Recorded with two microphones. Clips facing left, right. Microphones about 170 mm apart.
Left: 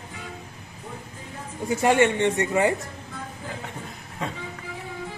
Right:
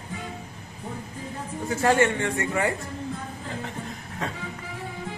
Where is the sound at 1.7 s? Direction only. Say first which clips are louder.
Left 2 dB; 15° left (ahead or behind).